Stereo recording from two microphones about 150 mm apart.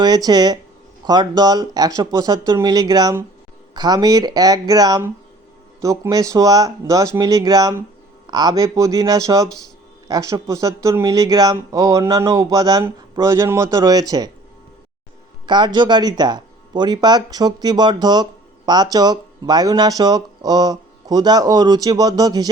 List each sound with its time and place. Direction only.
0.0 s speech: 25° right (ahead or behind)
15.4 s speech: 30° right (ahead or behind)